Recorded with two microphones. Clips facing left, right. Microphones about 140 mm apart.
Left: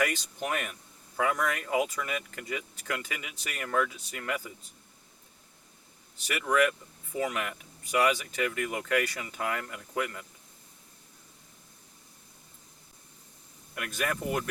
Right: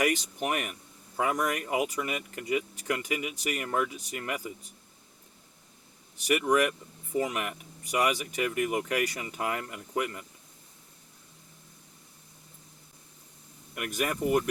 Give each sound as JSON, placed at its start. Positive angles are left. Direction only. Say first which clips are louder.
{"t": 0.0, "sound": "speech", "louder": "right 3 dB", "side_deg": -20}
{"t": 6.2, "sound": "speech", "louder": "right 2 dB", "side_deg": -20}
{"t": 13.7, "sound": "speech", "louder": "right 2 dB", "side_deg": -15}